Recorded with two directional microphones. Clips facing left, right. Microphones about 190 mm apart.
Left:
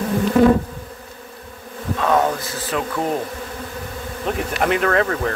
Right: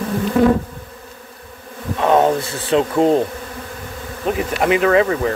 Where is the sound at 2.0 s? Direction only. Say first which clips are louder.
Right 4 dB; 25° right (ahead or behind).